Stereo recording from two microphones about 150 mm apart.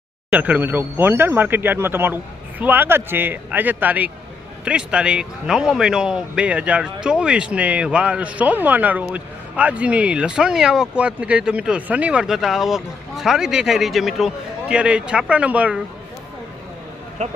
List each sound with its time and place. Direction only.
0.3 s speech: 10° right (ahead or behind)
17.2 s speech: 50° right (ahead or behind)